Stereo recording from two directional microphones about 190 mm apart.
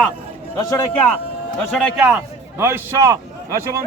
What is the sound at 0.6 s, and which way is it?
Speech, 20° left (ahead or behind).